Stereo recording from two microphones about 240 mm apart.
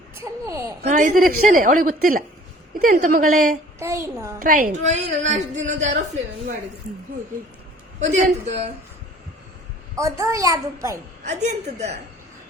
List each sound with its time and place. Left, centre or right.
0.2 s a child's voice: centre
0.8 s a woman's voice: right
3.8 s a child's voice: centre
4.4 s a woman's voice: right
8.0 s a woman's voice: right
9.9 s a child's voice: centre
11.2 s a woman's voice: right